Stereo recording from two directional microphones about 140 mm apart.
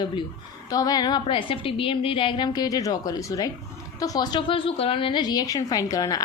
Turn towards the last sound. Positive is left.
turn(degrees=25)  # may be behind; listen again after turning